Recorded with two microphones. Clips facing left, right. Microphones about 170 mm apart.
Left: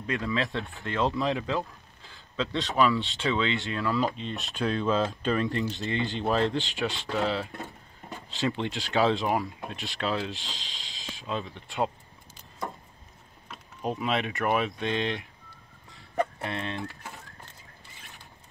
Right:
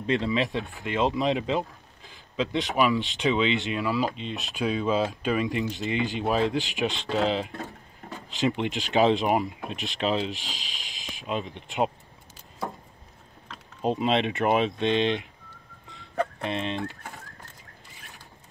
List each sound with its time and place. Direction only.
0.0 s a man's voice: 25° right (ahead or behind)
13.7 s speech: 25° right (ahead or behind)
16.4 s speech: 20° right (ahead or behind)